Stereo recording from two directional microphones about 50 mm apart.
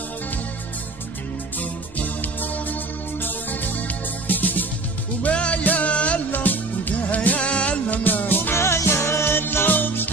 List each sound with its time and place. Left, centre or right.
1.6 s music: left
6.3 s music: left
8.5 s music: left